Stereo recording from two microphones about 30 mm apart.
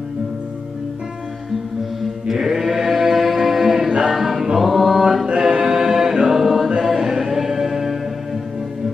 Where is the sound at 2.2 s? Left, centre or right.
Centre.